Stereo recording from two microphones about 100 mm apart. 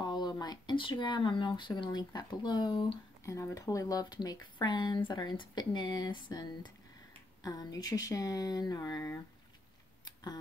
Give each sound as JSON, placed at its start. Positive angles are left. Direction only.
{"t": 0.0, "sound": "speech", "side_deg": 45}
{"t": 3.3, "sound": "speech", "side_deg": 30}
{"t": 10.0, "sound": "a sound", "side_deg": 40}